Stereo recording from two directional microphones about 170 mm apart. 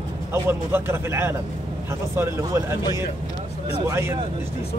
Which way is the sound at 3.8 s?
15° right (ahead or behind).